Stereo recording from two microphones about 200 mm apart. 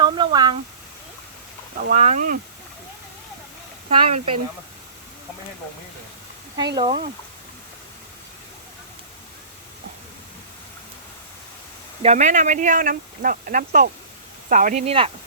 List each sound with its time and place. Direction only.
0.0 s a sound: 25° right (ahead or behind)
1.9 s speech: 35° right (ahead or behind)
3.8 s speech: 30° right (ahead or behind)
6.7 s speech: 25° right (ahead or behind)
12.0 s speech: 35° right (ahead or behind)